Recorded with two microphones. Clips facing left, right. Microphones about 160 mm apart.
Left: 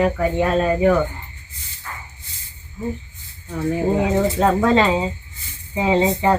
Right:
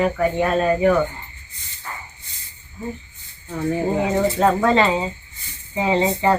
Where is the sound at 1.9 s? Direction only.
5° right (ahead or behind).